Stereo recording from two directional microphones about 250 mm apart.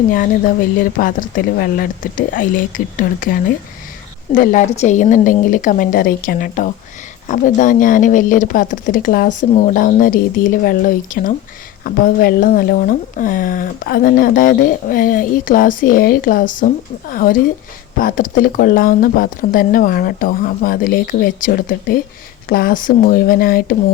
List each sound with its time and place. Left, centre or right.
0.1 s speech: left